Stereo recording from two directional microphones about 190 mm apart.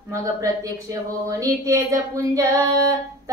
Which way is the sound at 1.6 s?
15° right (ahead or behind).